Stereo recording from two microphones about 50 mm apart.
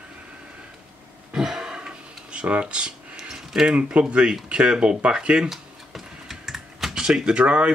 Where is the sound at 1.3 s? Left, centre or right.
Centre.